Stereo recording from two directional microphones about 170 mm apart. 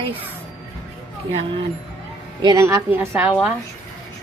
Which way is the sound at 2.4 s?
20° right (ahead or behind).